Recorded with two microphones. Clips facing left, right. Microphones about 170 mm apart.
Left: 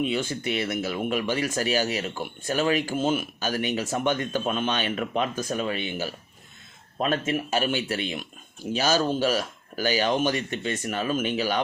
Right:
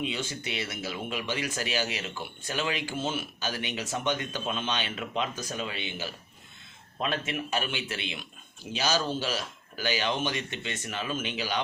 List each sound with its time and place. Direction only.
0.0 s speech: 50° left (ahead or behind)